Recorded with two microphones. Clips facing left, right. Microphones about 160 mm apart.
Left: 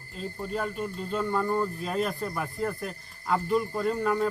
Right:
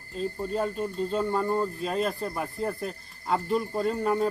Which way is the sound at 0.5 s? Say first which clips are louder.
Right 1 dB; 30° right (ahead or behind).